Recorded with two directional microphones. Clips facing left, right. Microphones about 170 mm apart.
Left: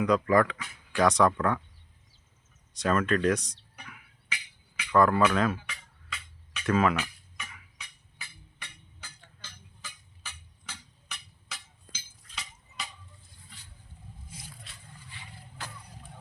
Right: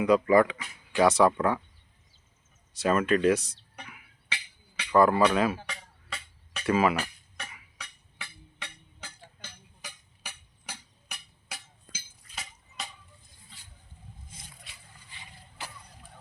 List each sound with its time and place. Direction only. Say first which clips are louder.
0.0 s speech: right 2 dB; 5° right (ahead or behind)
2.7 s speech: right 2 dB; 5° right (ahead or behind)
4.9 s speech: right 1 dB; 5° right (ahead or behind)
5.5 s music: right 4 dB; 35° right (ahead or behind)
6.7 s speech: right 1 dB; 5° right (ahead or behind)
6.9 s tick-tock: right 1 dB; 35° right (ahead or behind)
7.8 s a sound: right 8 dB; 65° right (ahead or behind)
9.8 s music: right 2 dB; 60° right (ahead or behind)
11.9 s a sound: right 2 dB; 10° right (ahead or behind)
15.1 s a sound: left 1 dB; 15° right (ahead or behind)